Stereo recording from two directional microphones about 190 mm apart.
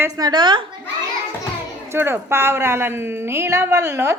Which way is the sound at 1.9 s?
10° right (ahead or behind).